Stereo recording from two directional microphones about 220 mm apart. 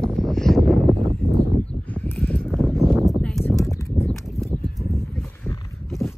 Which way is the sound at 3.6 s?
15° left (ahead or behind).